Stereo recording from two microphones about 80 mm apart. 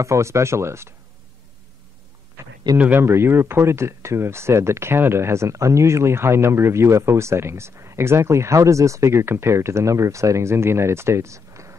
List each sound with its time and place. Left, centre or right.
0.0 s speech: right
2.4 s a sound: right
2.8 s speech: right